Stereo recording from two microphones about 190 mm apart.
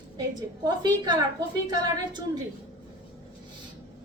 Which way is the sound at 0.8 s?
20° right (ahead or behind).